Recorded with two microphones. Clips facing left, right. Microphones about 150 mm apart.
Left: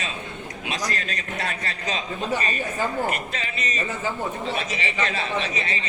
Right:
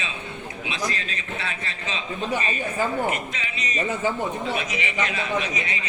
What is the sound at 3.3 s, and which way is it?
A man's voice, 40° left (ahead or behind).